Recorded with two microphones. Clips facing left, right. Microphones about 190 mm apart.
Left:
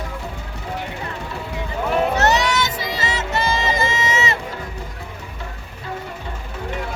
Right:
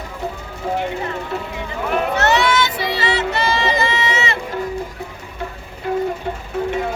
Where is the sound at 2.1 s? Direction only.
40° left (ahead or behind).